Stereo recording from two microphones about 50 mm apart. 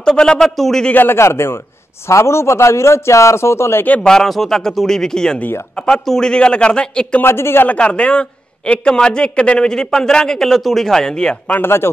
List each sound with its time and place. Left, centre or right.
0.0 s a man's voice: centre
0.9 s speech: left
1.2 s a man's voice: left
2.0 s a man's voice: left
4.0 s a man's voice: centre
7.2 s a man's voice: left
7.6 s a man's voice: left
11.6 s speech: left